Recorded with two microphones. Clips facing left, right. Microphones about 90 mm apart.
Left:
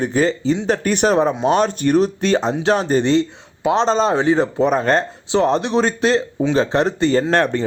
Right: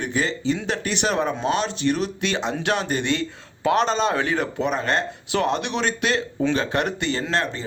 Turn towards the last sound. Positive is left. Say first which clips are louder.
# left 8 dB
turn(degrees=55)  # may be behind; listen again after turning